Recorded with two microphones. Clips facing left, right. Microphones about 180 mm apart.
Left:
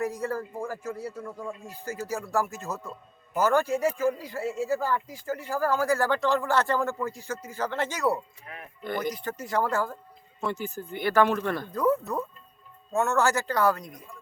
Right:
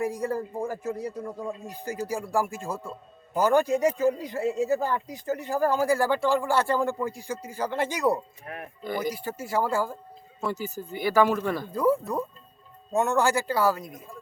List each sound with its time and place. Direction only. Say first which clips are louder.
0.0 s speech: right 2 dB; 15° right (ahead or behind)
8.5 s speech: right 9 dB; 50° right (ahead or behind)
8.8 s speech: even; 10° right (ahead or behind)